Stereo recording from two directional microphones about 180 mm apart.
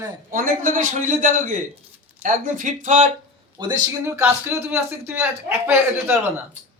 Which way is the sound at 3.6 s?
20° right (ahead or behind).